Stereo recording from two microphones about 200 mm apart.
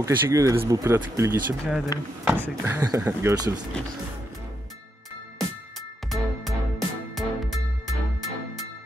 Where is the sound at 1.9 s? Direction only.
15° left (ahead or behind).